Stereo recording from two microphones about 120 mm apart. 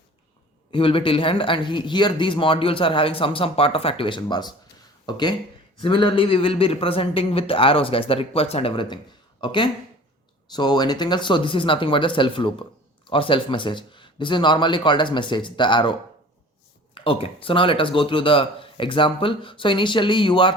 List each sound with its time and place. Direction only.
0.7 s speech: 45° left (ahead or behind)